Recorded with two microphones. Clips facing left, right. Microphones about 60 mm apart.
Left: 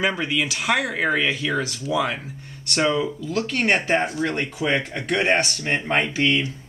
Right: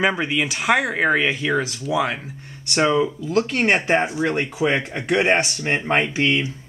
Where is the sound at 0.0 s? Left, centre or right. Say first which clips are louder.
Right 2 dB; centre.